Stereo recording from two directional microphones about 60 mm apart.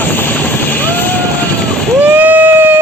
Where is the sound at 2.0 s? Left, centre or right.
Right.